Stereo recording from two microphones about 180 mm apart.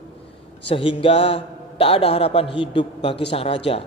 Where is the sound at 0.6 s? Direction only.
30° left (ahead or behind).